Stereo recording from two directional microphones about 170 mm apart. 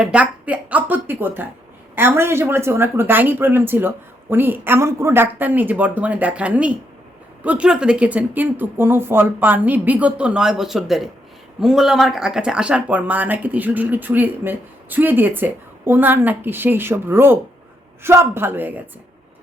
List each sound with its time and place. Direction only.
0.0 s speech: 5° right (ahead or behind)